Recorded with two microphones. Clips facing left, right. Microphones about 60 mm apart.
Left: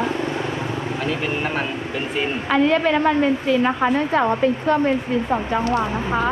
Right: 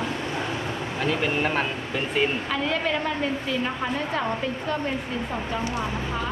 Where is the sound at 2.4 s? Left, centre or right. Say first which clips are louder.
Left 8 dB; left.